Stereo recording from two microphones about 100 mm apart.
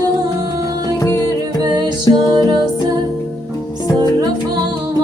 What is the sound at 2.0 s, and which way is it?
Music, 40° right (ahead or behind).